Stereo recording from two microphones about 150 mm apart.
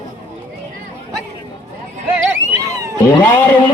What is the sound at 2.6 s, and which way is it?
Vehicle, 20° right (ahead or behind).